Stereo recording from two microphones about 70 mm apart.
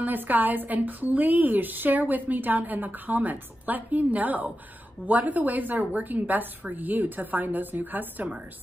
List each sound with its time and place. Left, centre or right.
0.0 s a woman's voice: right